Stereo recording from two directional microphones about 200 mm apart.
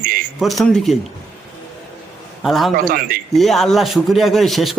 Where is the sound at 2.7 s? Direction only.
45° right (ahead or behind).